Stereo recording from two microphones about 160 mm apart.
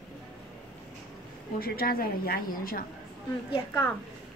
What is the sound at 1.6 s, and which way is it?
A woman's voice, 70° left (ahead or behind).